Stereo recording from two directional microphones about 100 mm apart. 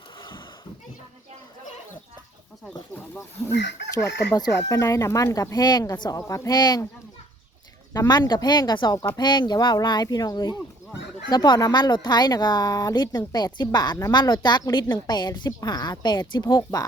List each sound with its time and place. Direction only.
0.2 s a sound: 55° left (ahead or behind)
2.9 s speech: 25° left (ahead or behind)
4.4 s speech: 35° left (ahead or behind)
7.9 s a woman's voice: 45° left (ahead or behind)